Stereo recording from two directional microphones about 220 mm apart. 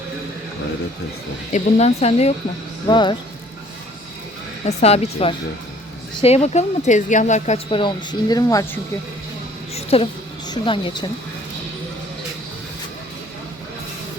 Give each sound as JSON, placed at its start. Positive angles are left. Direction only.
{"t": 1.5, "sound": "speech", "side_deg": 30}
{"t": 4.6, "sound": "speech", "side_deg": 30}
{"t": 9.7, "sound": "a sound", "side_deg": 25}
{"t": 10.5, "sound": "speech", "side_deg": 20}